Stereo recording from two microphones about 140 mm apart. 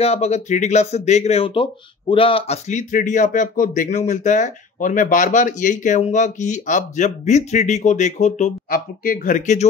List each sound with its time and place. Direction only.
0.0 s speech: 50° left (ahead or behind)